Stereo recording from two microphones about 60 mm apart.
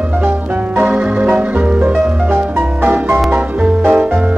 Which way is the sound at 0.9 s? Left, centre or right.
Right.